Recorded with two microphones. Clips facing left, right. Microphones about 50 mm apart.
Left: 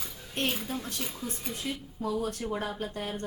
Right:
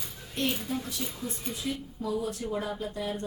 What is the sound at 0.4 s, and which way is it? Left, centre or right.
Speech, left.